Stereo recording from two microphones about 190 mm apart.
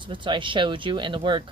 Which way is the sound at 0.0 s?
25° right (ahead or behind).